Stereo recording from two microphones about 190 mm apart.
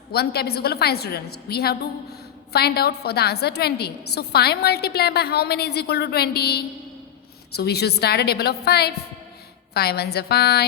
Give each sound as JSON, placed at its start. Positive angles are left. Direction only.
{"t": 0.1, "sound": "a woman's voice", "side_deg": 55}